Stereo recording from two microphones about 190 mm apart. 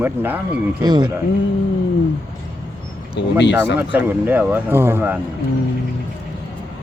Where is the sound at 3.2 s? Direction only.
70° left (ahead or behind).